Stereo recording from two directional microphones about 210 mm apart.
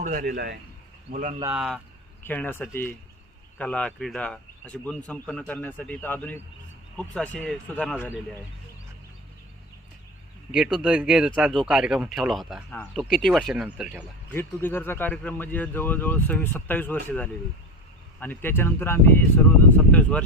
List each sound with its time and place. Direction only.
0.0 s speech: 40° right (ahead or behind)
1.5 s speech: 5° right (ahead or behind)
2.2 s speech: 10° left (ahead or behind)
10.5 s speech: centre (ahead or behind)
14.3 s speech: 10° left (ahead or behind)